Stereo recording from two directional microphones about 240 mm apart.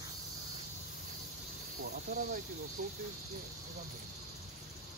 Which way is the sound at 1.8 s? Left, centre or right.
Right.